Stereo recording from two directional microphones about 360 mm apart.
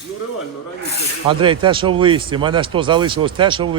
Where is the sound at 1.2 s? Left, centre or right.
Centre.